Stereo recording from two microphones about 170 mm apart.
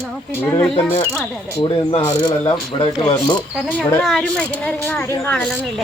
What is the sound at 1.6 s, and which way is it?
Speech, 30° left (ahead or behind).